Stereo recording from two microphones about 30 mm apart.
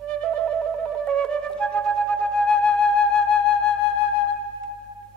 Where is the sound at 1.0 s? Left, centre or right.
Left.